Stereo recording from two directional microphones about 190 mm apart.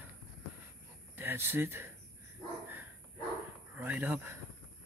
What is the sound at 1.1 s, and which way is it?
Speech, 10° right (ahead or behind).